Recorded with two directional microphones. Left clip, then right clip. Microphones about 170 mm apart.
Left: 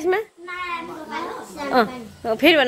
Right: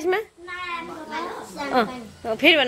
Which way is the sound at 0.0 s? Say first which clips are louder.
Left 2 dB; 5° left (ahead or behind).